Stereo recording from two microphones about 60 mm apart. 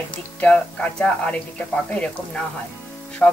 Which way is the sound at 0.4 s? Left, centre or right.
Centre.